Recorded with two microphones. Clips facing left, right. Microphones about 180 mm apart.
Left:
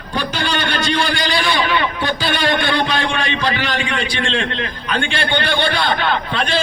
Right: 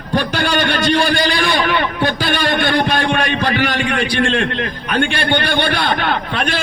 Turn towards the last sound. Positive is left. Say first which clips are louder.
# right 1 dB
turn(degrees=-55)  # may be behind; listen again after turning